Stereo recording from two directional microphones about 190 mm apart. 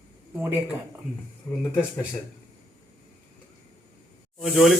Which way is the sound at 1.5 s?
15° left (ahead or behind).